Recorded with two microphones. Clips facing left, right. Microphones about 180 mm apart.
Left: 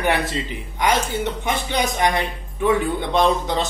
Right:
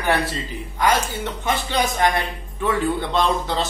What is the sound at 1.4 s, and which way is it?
A man's voice, 15° left (ahead or behind).